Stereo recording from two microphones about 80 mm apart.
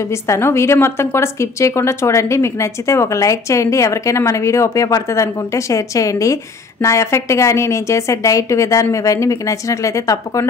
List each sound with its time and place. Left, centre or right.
0.0 s a woman's voice: left